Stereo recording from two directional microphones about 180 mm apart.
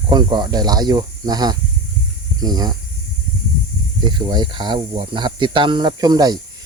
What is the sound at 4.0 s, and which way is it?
Speech, 25° right (ahead or behind).